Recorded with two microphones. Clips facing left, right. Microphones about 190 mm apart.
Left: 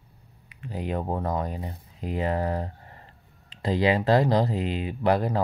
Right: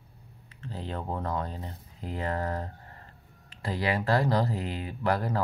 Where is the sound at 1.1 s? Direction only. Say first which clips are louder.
Left 4 dB; 15° left (ahead or behind).